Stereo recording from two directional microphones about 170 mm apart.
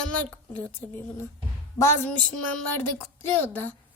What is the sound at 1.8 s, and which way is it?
A woman's voice, 15° left (ahead or behind).